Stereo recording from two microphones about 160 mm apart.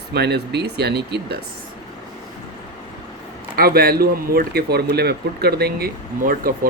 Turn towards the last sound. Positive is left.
turn(degrees=-70)  # may be behind; listen again after turning